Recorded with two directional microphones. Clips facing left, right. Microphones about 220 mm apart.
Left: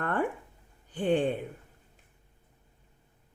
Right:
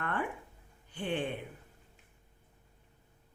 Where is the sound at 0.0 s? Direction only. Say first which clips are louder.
Left 6 dB; 45° left (ahead or behind).